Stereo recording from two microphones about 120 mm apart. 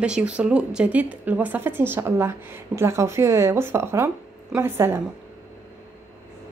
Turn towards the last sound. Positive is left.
turn(degrees=-20)  # may be behind; listen again after turning